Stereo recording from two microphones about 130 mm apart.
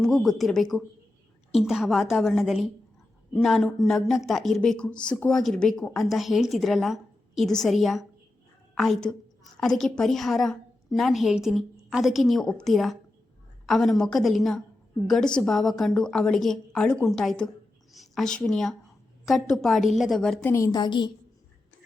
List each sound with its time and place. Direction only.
0.0 s a woman's voice: centre (ahead or behind)
20.4 s a woman's voice: 20° left (ahead or behind)
20.7 s a woman's voice: 30° left (ahead or behind)